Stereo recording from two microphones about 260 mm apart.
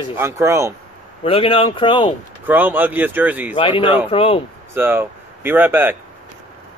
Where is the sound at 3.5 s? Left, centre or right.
Centre.